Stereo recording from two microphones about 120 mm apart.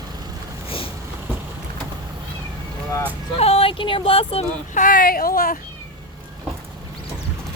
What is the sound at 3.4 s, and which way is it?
Speech, 60° left (ahead or behind).